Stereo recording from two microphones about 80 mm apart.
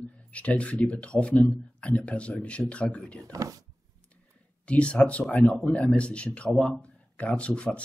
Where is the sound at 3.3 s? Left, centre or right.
Right.